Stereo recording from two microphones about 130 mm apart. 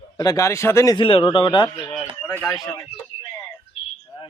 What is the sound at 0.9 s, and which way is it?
Speech, 45° left (ahead or behind).